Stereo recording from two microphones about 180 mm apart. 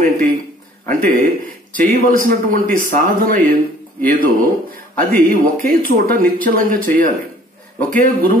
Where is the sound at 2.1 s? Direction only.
50° right (ahead or behind).